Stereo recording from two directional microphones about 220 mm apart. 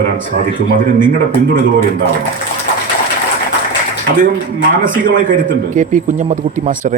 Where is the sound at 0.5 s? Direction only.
40° right (ahead or behind).